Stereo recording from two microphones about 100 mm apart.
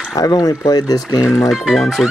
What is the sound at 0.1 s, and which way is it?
Speech, 40° left (ahead or behind).